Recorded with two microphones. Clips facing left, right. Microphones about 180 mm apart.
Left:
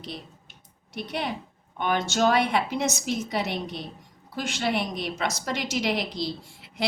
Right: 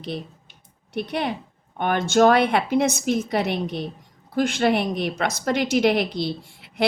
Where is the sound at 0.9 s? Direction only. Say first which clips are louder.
Right 5 dB; 55° right (ahead or behind).